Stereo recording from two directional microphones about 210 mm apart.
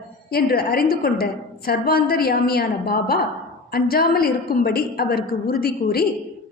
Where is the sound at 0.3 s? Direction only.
45° left (ahead or behind).